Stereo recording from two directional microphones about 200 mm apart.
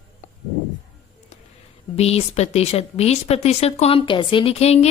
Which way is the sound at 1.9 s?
30° left (ahead or behind).